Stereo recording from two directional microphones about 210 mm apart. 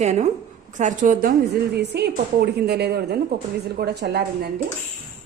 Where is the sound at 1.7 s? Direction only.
50° right (ahead or behind).